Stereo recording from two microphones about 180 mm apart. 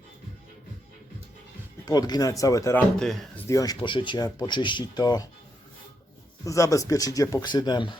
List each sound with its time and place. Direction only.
1.8 s speech: 20° left (ahead or behind)
3.0 s speech: centre (ahead or behind)
3.4 s speech: 20° left (ahead or behind)
6.4 s speech: 20° left (ahead or behind)